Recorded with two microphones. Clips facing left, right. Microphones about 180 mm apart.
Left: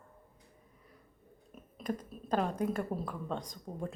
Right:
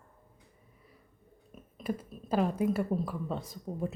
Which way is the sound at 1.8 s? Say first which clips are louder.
Right 2 dB; 5° right (ahead or behind).